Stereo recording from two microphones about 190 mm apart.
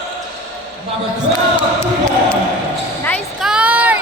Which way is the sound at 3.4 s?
5° right (ahead or behind).